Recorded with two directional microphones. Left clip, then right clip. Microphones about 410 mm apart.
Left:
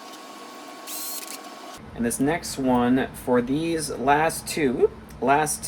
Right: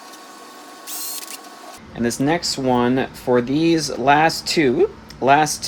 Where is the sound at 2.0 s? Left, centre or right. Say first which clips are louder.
Right 5 dB; right.